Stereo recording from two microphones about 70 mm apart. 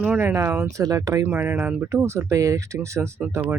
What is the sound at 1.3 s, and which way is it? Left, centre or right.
Speech, right.